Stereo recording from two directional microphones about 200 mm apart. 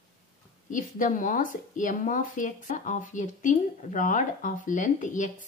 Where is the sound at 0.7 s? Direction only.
40° left (ahead or behind).